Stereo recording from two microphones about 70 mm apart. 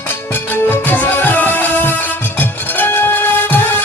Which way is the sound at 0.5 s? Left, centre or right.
Left.